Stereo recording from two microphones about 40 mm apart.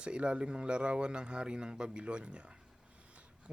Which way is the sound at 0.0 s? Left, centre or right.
Right.